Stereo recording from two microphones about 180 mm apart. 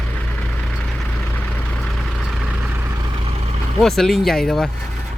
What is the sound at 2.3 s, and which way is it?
Vehicle, 5° right (ahead or behind).